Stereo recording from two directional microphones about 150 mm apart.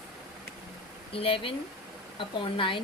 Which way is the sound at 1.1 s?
35° left (ahead or behind).